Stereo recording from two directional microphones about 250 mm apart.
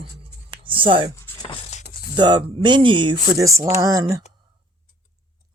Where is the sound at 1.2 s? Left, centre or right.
Centre.